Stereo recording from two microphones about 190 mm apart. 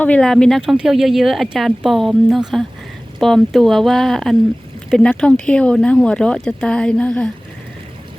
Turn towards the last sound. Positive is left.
turn(degrees=5)  # may be behind; listen again after turning